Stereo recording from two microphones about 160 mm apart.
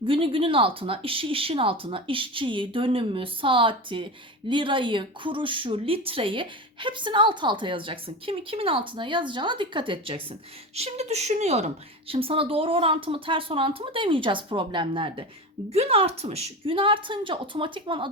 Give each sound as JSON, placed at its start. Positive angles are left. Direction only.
{"t": 0.0, "sound": "speech", "side_deg": -35}
{"t": 10.8, "sound": "speech", "side_deg": -40}